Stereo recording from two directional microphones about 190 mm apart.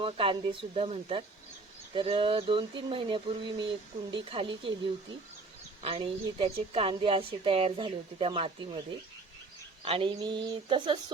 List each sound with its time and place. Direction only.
0.0 s a woman's voice: 30° right (ahead or behind)
5.8 s a woman's voice: 30° right (ahead or behind)
9.8 s a woman's voice: 30° right (ahead or behind)